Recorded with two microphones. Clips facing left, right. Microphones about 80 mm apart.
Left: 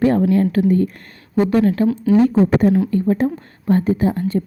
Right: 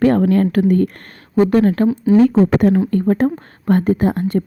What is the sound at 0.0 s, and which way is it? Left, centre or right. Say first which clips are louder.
A woman's voice: right 2 dB; right.